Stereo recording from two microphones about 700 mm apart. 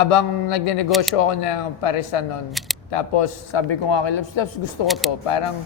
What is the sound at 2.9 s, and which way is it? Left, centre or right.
A man's voice, left.